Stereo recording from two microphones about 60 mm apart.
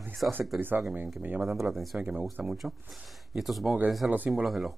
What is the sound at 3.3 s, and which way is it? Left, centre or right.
Speech, centre.